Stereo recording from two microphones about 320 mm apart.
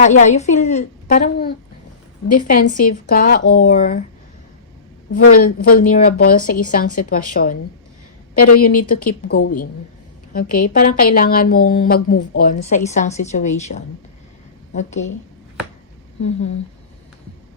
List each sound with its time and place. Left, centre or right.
0.0 s a woman's voice: left
5.1 s a woman's voice: left
10.7 s a woman's voice: left